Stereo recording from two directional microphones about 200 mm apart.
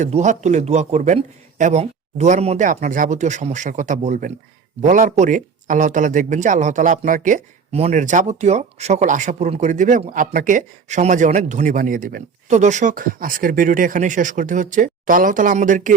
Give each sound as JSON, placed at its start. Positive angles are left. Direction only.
{"t": 0.0, "sound": "speech", "side_deg": -35}